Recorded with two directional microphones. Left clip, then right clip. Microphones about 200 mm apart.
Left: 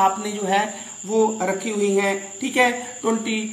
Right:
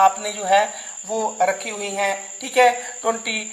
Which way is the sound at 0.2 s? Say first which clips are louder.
Right 4 dB; 50° right (ahead or behind).